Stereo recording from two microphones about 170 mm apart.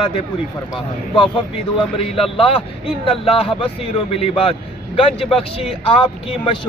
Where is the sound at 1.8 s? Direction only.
30° left (ahead or behind).